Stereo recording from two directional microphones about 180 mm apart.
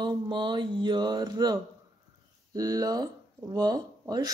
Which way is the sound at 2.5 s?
20° right (ahead or behind).